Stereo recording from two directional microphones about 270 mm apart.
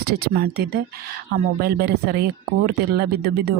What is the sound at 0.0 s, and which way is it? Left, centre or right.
Speech, right.